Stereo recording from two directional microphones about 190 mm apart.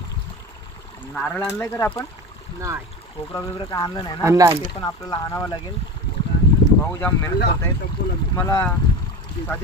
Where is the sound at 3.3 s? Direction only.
20° left (ahead or behind).